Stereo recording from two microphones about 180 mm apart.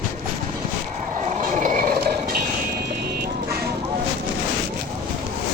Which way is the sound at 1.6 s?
50° right (ahead or behind).